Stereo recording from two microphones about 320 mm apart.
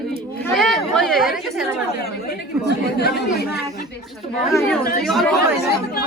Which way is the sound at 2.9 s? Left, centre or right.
Left.